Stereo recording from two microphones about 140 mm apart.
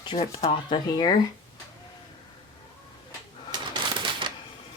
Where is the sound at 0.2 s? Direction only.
50° left (ahead or behind).